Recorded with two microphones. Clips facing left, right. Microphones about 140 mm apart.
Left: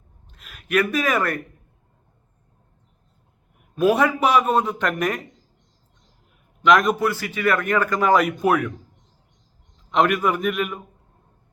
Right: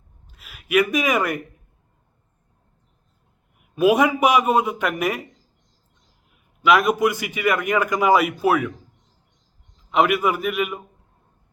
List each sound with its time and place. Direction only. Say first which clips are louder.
0.3 s a man's voice: right 1 dB; 5° right (ahead or behind)
3.8 s a man's voice: right 1 dB; 10° right (ahead or behind)
6.6 s a man's voice: even; 5° right (ahead or behind)
9.7 s a man's voice: right 1 dB; 5° right (ahead or behind)